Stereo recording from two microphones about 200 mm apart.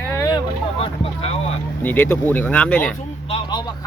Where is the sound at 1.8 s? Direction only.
10° left (ahead or behind).